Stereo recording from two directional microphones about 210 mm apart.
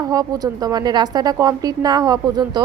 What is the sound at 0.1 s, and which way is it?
A woman's voice, 15° right (ahead or behind).